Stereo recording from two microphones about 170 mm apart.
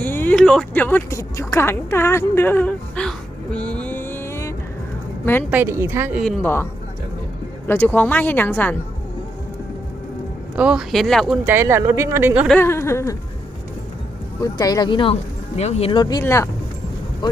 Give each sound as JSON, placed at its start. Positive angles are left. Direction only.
{"t": 0.0, "sound": "a sound", "side_deg": 10}
{"t": 0.3, "sound": "a woman's voice", "side_deg": 5}
{"t": 5.5, "sound": "speech", "side_deg": -15}
{"t": 6.1, "sound": "speech", "side_deg": 0}
{"t": 7.7, "sound": "speech", "side_deg": 10}
{"t": 10.5, "sound": "speech", "side_deg": -5}
{"t": 11.4, "sound": "speech", "side_deg": -15}
{"t": 12.5, "sound": "speech", "side_deg": 15}
{"t": 14.4, "sound": "speech", "side_deg": 20}